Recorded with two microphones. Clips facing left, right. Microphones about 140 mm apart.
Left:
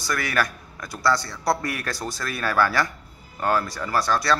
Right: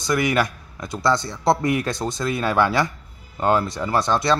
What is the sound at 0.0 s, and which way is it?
A man's voice, 20° right (ahead or behind).